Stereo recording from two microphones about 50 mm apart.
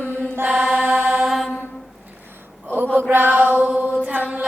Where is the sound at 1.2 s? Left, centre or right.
Centre.